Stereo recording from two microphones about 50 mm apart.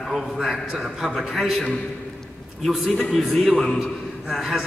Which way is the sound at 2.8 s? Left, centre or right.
Left.